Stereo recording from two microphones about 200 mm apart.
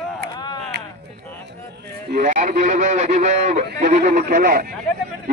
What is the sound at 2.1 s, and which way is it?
Speech, 40° right (ahead or behind).